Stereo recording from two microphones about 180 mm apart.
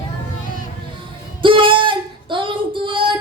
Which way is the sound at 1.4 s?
30° right (ahead or behind).